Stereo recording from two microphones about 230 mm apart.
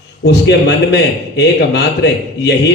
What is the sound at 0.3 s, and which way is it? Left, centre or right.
A man's voice, left.